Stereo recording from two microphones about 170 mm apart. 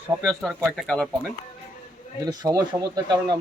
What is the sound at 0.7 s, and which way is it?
Speech, 5° left (ahead or behind).